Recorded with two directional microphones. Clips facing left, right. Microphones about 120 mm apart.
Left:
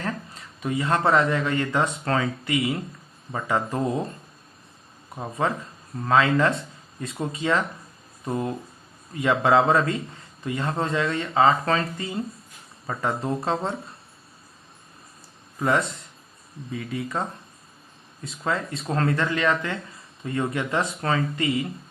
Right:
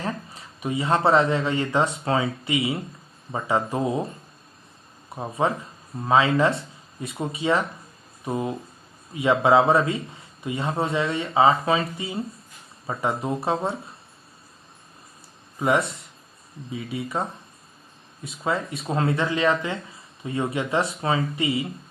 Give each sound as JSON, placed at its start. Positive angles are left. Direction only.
{"t": 0.0, "sound": "speech", "side_deg": -15}
{"t": 3.8, "sound": "speech", "side_deg": -5}
{"t": 5.1, "sound": "speech", "side_deg": -15}
{"t": 15.5, "sound": "speech", "side_deg": -15}
{"t": 18.9, "sound": "speech", "side_deg": -15}